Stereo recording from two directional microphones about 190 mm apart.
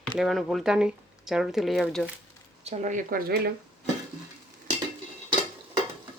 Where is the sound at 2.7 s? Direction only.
40° right (ahead or behind).